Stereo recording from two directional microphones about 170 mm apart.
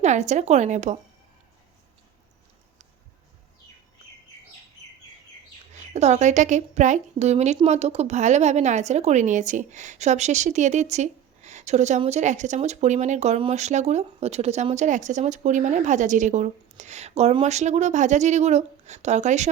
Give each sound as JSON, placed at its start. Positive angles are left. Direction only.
{"t": 0.0, "sound": "a woman's voice", "side_deg": -45}
{"t": 5.8, "sound": "a woman's voice", "side_deg": -40}